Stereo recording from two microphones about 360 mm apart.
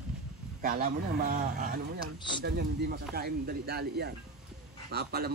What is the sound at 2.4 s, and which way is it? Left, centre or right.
Speech, right.